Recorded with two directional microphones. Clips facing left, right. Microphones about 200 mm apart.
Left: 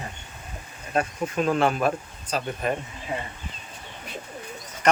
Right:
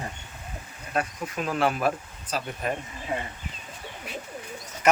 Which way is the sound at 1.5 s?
5° right (ahead or behind).